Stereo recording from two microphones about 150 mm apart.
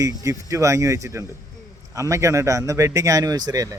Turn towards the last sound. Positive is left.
turn(degrees=-25)  # may be behind; listen again after turning